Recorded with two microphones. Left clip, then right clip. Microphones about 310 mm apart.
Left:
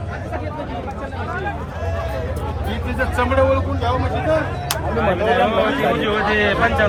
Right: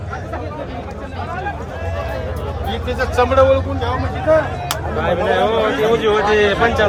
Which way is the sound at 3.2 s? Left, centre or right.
Right.